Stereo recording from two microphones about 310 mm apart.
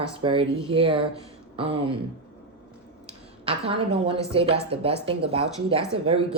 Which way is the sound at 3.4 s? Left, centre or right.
Centre.